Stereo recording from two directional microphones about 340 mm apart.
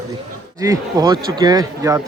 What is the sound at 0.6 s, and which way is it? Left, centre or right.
Speech, centre.